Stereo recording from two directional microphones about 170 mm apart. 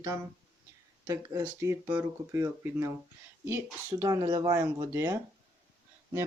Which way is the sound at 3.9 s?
20° right (ahead or behind).